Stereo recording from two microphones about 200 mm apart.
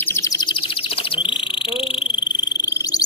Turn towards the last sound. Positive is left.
turn(degrees=20)  # may be behind; listen again after turning